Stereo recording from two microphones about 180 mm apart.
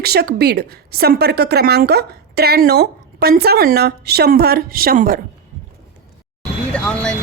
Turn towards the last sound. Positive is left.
turn(degrees=5)  # may be behind; listen again after turning